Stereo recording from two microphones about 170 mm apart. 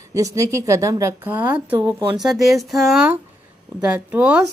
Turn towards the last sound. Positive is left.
turn(degrees=-10)  # may be behind; listen again after turning